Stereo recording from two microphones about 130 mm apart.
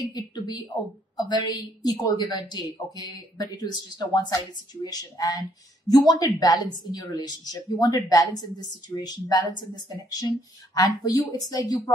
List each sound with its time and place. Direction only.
0.0 s a woman's voice: 30° left (ahead or behind)